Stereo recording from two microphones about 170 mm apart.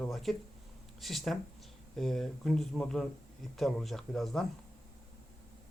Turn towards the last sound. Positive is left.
turn(degrees=0)  # may be behind; listen again after turning